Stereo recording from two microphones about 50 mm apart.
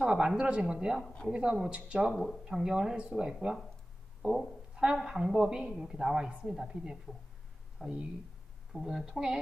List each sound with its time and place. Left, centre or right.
0.0 s a sound: centre
0.4 s a woman's voice: centre
4.7 s a woman's voice: centre